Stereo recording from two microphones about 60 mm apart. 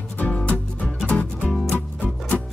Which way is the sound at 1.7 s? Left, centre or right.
Left.